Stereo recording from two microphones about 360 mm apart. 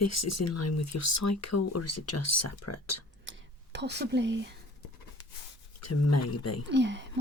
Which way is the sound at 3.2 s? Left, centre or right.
Right.